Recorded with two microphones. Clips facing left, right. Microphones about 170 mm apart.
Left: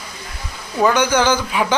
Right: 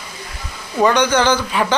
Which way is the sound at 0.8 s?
10° left (ahead or behind).